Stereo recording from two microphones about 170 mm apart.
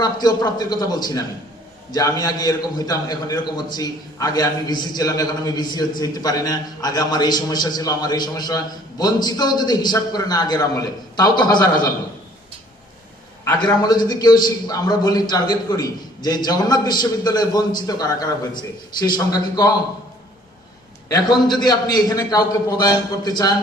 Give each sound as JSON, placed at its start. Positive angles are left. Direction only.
{"t": 0.0, "sound": "a man's voice", "side_deg": 25}
{"t": 13.6, "sound": "a man's voice", "side_deg": 25}
{"t": 21.1, "sound": "a man's voice", "side_deg": 25}